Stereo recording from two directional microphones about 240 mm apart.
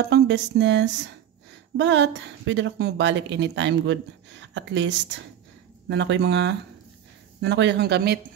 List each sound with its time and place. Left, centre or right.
0.1 s a woman's voice: right